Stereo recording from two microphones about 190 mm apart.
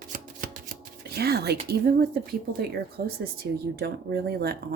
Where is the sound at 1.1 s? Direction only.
55° right (ahead or behind).